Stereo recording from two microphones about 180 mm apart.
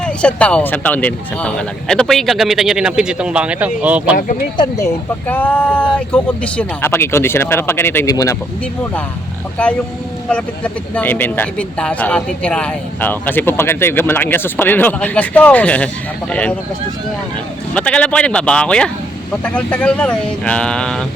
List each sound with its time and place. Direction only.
0.0 s speech: 5° left (ahead or behind)
4.5 s speech: 25° left (ahead or behind)
5.3 s speech: 10° left (ahead or behind)
9.6 s speech: 5° left (ahead or behind)
17.7 s speech: 5° left (ahead or behind)